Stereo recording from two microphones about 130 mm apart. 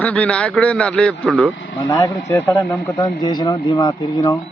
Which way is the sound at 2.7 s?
10° left (ahead or behind).